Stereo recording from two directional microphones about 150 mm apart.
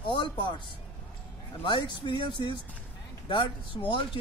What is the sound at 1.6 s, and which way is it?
Speech, 30° left (ahead or behind).